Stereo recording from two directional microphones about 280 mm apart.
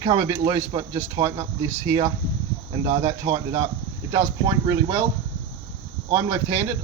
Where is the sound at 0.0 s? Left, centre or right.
Centre.